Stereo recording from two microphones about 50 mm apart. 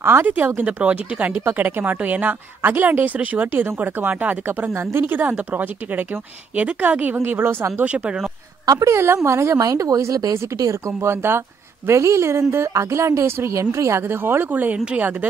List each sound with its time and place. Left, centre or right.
0.0 s speech: right
0.6 s speech: right
4.6 s speech: right
5.3 s speech: right
7.2 s speech: right
7.8 s speech: right
8.8 s a woman's voice: right
10.0 s speech: right
11.0 s speech: right
11.9 s a woman's voice: right
14.0 s speech: right